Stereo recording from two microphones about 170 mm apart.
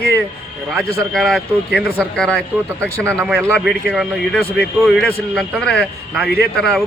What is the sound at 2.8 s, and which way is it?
Speech, 15° right (ahead or behind).